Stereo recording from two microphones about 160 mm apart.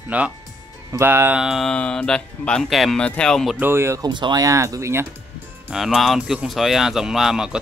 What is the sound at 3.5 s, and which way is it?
Speech, 15° right (ahead or behind).